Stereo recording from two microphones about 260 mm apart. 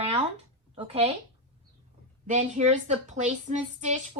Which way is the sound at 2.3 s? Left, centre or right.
Right.